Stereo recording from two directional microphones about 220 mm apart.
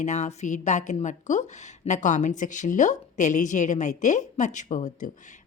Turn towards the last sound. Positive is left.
turn(degrees=35)  # may be behind; listen again after turning